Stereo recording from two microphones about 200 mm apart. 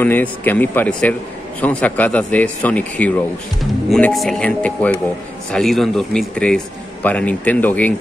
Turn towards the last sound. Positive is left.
turn(degrees=10)  # may be behind; listen again after turning